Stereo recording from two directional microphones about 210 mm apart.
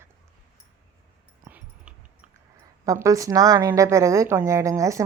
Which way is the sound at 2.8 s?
15° right (ahead or behind).